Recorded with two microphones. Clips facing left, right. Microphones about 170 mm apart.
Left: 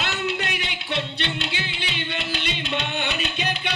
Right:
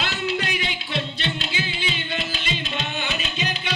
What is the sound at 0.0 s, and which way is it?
Music, 60° left (ahead or behind).